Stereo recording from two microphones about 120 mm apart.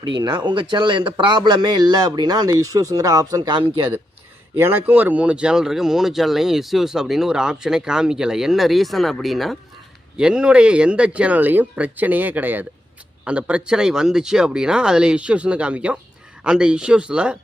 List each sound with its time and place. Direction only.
0.2 s speech: 40° right (ahead or behind)
4.5 s speech: 20° right (ahead or behind)